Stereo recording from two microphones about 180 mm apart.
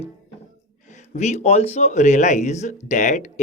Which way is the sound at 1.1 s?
40° left (ahead or behind).